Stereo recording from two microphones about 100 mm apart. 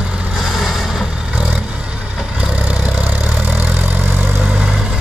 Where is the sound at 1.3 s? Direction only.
10° right (ahead or behind).